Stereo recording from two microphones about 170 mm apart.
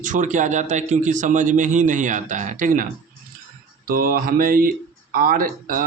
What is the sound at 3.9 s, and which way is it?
A man's voice, 55° right (ahead or behind).